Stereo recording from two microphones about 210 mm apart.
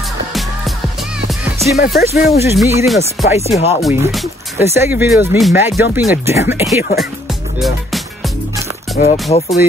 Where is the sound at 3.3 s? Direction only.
30° left (ahead or behind).